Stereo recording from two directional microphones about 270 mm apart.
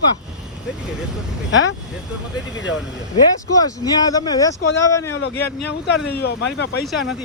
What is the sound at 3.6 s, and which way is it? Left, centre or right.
Speech, centre.